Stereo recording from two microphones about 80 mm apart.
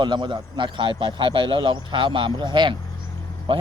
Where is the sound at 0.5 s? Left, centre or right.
Right.